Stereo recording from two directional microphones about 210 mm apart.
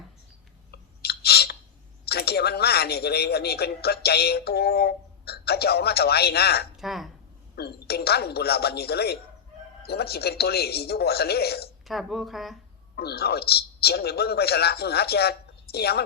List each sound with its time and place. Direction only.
0.7 s a sound: 50° left (ahead or behind)
2.0 s speech: 50° left (ahead or behind)
6.7 s speech: centre (ahead or behind)
7.5 s speech: 50° left (ahead or behind)
11.9 s speech: centre (ahead or behind)
13.0 s speech: 50° left (ahead or behind)